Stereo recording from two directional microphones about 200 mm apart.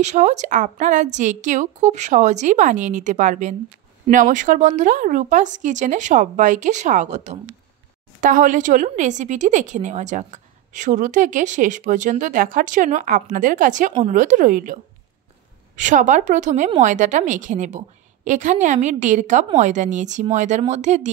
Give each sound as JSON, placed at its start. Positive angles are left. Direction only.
{"t": 0.0, "sound": "a woman's voice", "side_deg": -35}